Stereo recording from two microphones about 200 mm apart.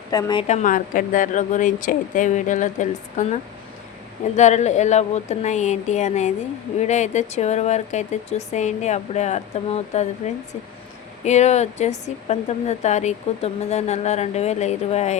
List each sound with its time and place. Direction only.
0.1 s a woman's voice: 20° left (ahead or behind)
0.4 s speech: 40° left (ahead or behind)
4.4 s speech: 35° left (ahead or behind)